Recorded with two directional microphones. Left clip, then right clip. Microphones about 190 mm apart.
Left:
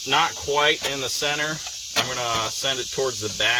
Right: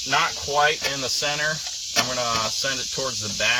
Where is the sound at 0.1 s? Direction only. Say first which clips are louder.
Left 1 dB; 30° left (ahead or behind).